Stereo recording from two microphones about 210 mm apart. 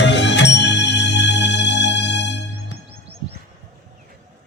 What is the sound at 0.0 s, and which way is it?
Music, 55° left (ahead or behind).